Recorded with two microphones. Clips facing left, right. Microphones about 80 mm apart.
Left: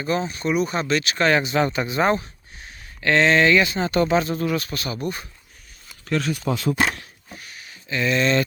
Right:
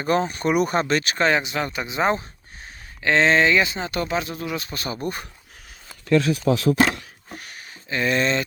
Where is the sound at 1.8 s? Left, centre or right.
Centre.